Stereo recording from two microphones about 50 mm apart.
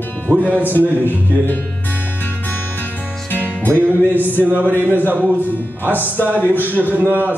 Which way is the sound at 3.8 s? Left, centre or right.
Right.